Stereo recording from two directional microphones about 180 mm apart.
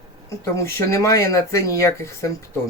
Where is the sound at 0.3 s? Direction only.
15° left (ahead or behind).